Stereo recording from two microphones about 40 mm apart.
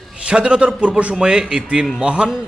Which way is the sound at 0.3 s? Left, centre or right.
Right.